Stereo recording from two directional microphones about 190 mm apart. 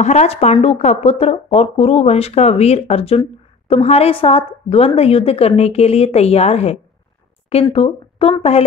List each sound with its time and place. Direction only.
0.0 s speech: 35° left (ahead or behind)